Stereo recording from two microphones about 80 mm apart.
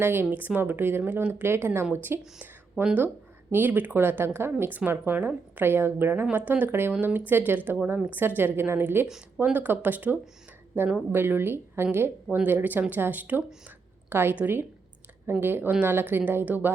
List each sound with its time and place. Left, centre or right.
0.0 s speech: right